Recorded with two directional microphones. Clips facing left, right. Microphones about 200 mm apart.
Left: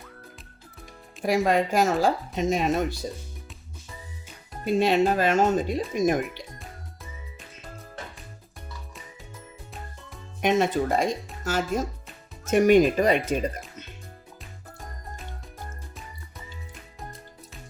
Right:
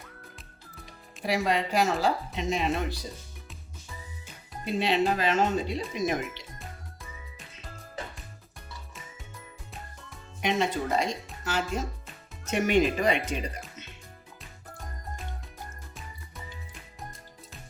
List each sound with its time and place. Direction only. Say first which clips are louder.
1.2 s speech: left 5 dB; 50° left (ahead or behind)
4.6 s speech: left 5 dB; 45° left (ahead or behind)
6.6 s music: left 1 dB; centre (ahead or behind)
10.4 s speech: left 5 dB; 50° left (ahead or behind)